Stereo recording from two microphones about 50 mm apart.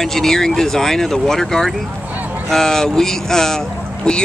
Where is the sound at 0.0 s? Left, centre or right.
Centre.